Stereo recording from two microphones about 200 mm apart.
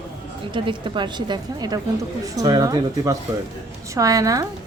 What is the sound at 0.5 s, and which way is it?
A woman's voice, 25° right (ahead or behind).